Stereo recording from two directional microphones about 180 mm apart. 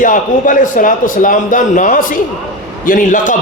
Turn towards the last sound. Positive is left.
turn(degrees=45)  # may be behind; listen again after turning